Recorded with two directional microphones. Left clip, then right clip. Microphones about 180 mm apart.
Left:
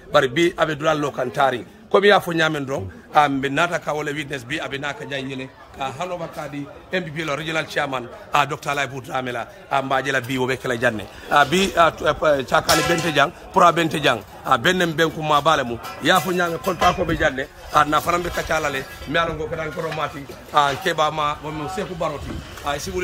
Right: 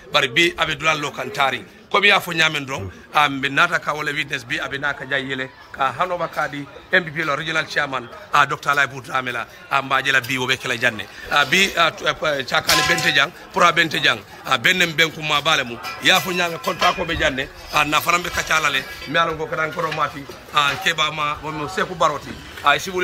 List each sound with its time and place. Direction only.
0.1 s a man's voice: 40° left (ahead or behind); by 19.9 s 15° left (ahead or behind)
20.5 s a man's voice: 30° left (ahead or behind)